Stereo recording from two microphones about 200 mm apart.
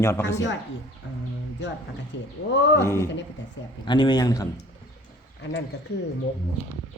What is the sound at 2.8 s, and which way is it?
A man's voice, 15° left (ahead or behind).